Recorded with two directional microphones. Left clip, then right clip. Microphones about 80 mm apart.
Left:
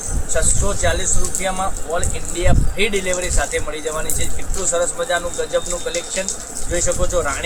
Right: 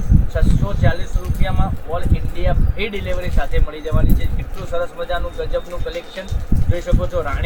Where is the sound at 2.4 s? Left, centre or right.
Left.